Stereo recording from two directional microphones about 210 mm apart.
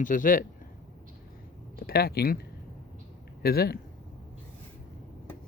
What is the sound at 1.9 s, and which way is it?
Speech, 45° left (ahead or behind).